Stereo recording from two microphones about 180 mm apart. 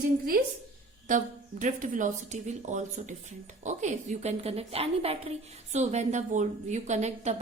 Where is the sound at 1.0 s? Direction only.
45° right (ahead or behind).